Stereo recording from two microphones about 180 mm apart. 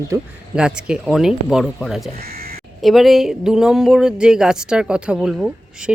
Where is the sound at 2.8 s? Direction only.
Centre (ahead or behind).